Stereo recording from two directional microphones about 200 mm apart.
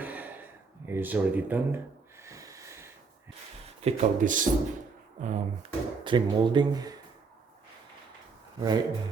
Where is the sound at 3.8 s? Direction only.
40° right (ahead or behind).